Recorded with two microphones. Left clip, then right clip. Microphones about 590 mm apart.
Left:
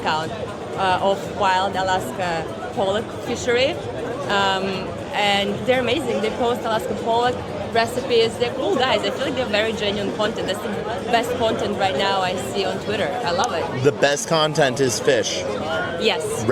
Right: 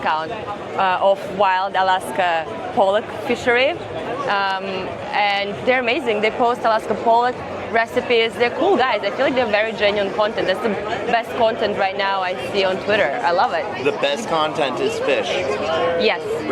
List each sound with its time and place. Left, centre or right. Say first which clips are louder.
0.8 s speech: right 3 dB; right
3.4 s speech: right 2 dB; right
13.8 s speech: left 4 dB; left